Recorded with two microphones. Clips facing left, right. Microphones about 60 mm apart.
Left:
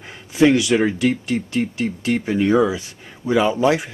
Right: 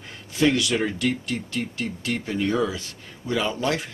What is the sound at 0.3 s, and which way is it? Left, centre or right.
Speech, centre.